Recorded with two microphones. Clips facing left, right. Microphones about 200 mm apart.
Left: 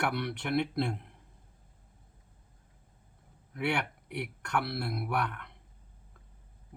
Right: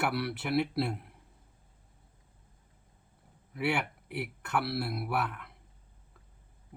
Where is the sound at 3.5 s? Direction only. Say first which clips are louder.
Right 1 dB; 5° right (ahead or behind).